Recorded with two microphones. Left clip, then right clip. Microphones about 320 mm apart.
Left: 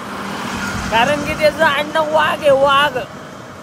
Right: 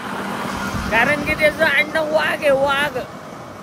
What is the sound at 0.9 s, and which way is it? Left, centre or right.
Speech, centre.